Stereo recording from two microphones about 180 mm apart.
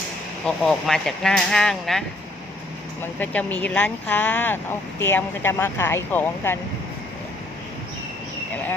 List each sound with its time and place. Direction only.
0.4 s speech: centre (ahead or behind)